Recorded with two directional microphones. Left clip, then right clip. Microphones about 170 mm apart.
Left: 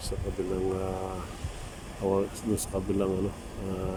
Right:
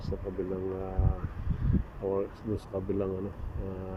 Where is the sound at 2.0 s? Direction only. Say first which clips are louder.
Left 4 dB; 15° left (ahead or behind).